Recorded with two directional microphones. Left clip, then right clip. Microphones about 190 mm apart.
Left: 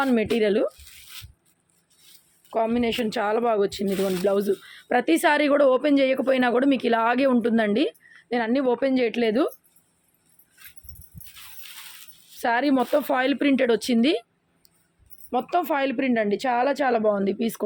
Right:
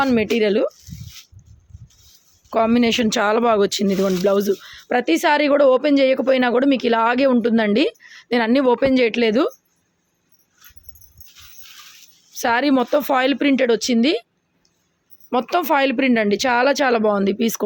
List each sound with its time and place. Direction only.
0.0 s speech: 25° right (ahead or behind)
2.5 s speech: 45° right (ahead or behind)
12.4 s speech: 30° right (ahead or behind)
15.3 s speech: 40° right (ahead or behind)